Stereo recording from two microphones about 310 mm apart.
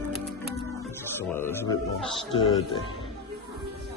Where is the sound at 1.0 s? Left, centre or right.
Centre.